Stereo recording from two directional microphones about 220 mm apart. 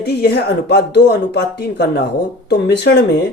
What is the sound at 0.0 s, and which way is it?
Speech, 45° left (ahead or behind).